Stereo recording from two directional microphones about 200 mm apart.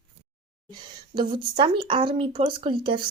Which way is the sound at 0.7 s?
20° right (ahead or behind).